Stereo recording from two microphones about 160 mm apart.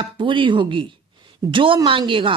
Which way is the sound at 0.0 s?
30° right (ahead or behind).